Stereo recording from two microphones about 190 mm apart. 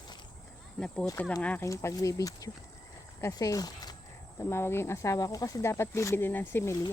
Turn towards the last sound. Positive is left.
turn(degrees=10)  # may be behind; listen again after turning